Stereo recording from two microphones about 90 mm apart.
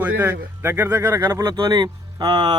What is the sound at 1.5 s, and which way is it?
Speech, 55° right (ahead or behind).